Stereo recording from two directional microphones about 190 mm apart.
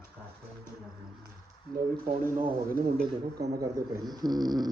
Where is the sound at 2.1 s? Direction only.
35° right (ahead or behind).